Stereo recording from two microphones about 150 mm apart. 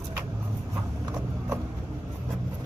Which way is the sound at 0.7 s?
15° right (ahead or behind).